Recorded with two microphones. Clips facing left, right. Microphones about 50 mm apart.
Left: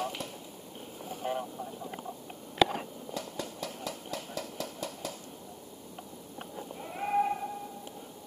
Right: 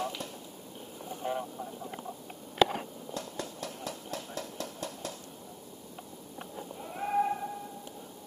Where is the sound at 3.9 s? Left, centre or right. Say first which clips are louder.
Even; left.